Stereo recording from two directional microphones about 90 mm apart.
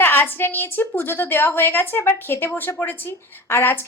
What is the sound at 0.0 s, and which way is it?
A woman's voice, 25° left (ahead or behind).